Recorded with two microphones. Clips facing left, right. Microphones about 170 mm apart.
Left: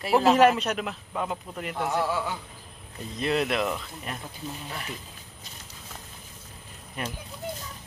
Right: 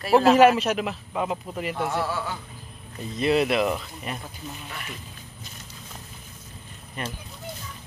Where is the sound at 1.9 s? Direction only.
15° left (ahead or behind).